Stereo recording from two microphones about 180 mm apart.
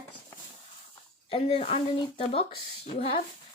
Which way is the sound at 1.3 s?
35° left (ahead or behind).